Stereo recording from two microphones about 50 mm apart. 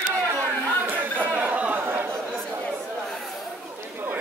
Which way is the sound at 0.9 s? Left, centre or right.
Right.